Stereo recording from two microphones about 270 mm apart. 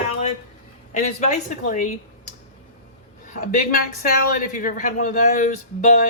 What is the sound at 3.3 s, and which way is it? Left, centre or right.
A woman's voice, left.